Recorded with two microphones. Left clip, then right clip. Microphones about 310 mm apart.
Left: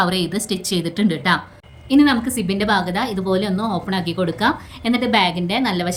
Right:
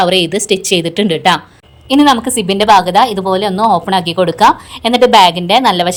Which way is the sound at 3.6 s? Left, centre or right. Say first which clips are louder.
Right 13 dB; right.